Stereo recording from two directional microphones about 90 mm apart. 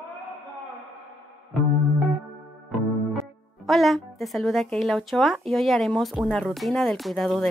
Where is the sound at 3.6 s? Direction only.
Centre (ahead or behind).